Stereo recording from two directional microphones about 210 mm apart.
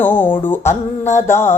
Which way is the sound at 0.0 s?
10° left (ahead or behind).